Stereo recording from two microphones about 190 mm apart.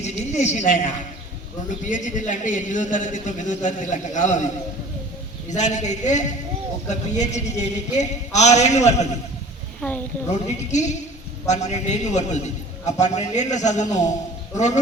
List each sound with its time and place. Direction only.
0.0 s a man's voice: 40° left (ahead or behind)
5.5 s a man's voice: 40° left (ahead or behind)
10.7 s a man's voice: 40° left (ahead or behind)